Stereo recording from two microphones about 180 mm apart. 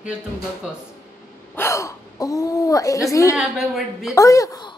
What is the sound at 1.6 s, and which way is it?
Speech, 15° left (ahead or behind).